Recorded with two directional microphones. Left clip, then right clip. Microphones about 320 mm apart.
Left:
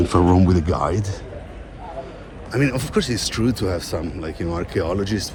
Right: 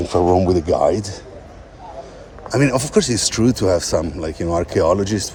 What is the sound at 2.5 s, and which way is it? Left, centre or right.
Speech, right.